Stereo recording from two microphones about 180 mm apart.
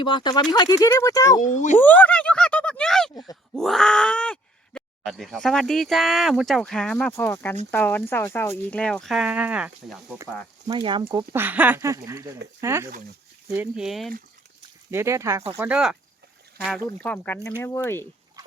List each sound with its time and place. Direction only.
0.0 s speech: 25° left (ahead or behind)
1.5 s speech: 45° left (ahead or behind)
1.8 s a sound: 10° left (ahead or behind)
3.5 s speech: centre (ahead or behind)
10.7 s speech: 25° right (ahead or behind)
11.1 s speech: 15° right (ahead or behind)
14.8 s speech: 15° right (ahead or behind); by 18.0 s 15° left (ahead or behind)